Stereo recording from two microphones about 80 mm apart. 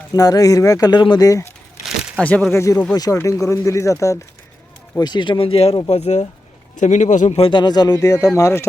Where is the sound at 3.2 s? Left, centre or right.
Left.